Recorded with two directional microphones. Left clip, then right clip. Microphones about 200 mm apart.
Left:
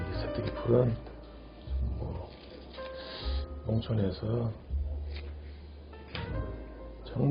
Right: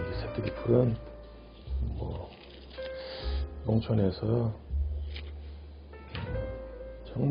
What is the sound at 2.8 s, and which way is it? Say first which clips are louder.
Music: right 2 dB; 30° right (ahead or behind).